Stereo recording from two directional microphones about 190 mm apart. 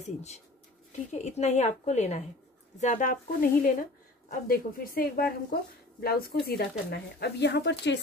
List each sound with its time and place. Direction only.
0.0 s a woman's voice: 35° left (ahead or behind); by 8.0 s 65° left (ahead or behind)